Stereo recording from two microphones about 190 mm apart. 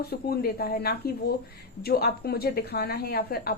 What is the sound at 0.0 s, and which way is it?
A woman's voice, 55° left (ahead or behind).